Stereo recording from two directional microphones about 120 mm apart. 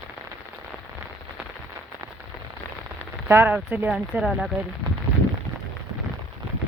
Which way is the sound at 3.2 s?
15° right (ahead or behind).